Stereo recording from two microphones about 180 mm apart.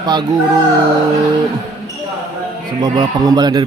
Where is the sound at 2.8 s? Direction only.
20° right (ahead or behind).